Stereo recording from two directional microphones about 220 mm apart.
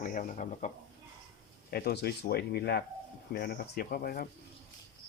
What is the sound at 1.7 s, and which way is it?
Speech, 45° left (ahead or behind).